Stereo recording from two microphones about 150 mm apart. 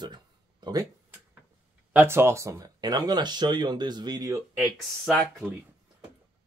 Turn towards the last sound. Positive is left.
turn(degrees=5)  # may be behind; listen again after turning